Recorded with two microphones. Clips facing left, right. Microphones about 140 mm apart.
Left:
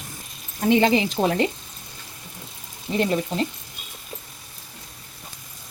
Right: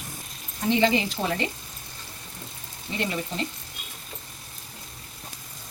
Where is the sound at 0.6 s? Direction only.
55° left (ahead or behind).